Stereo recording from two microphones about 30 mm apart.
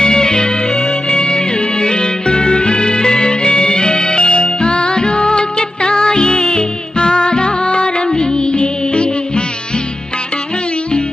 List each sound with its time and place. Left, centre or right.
0.0 s music: left